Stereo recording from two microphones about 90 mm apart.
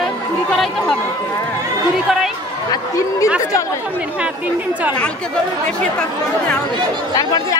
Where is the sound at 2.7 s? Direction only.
40° left (ahead or behind).